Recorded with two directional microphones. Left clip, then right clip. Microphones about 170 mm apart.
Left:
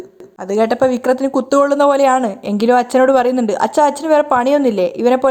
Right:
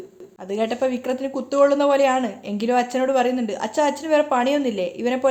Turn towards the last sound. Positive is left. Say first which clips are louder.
# left 10 dB
turn(degrees=40)  # may be behind; listen again after turning